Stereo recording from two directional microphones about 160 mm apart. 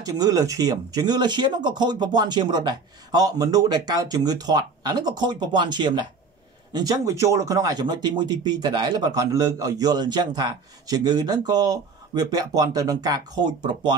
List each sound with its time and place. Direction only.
0.0 s speech: 20° right (ahead or behind)